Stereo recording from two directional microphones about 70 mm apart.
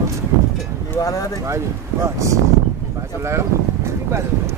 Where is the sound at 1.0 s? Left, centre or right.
Left.